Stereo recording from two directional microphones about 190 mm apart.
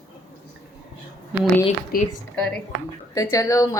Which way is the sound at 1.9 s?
50° left (ahead or behind).